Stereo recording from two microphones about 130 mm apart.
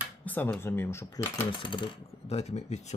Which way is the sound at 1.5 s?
40° left (ahead or behind).